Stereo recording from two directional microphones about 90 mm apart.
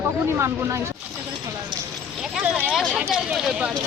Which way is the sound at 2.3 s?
5° right (ahead or behind).